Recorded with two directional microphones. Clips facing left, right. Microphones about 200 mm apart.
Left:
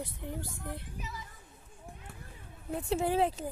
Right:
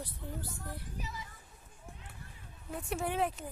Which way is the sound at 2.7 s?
25° left (ahead or behind).